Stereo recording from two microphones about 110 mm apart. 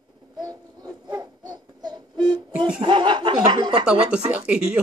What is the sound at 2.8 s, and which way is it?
Speech, 45° right (ahead or behind).